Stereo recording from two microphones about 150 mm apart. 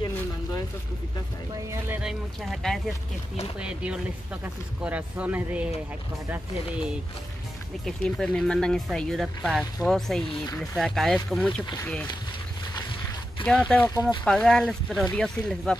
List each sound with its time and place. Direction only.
2.0 s speech: 5° right (ahead or behind)
7.8 s speech: 5° left (ahead or behind)
10.4 s speech: 20° left (ahead or behind)
10.8 s speech: centre (ahead or behind)
13.5 s speech: 5° left (ahead or behind)